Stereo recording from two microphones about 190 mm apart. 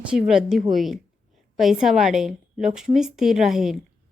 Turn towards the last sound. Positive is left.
turn(degrees=0)  # may be behind; listen again after turning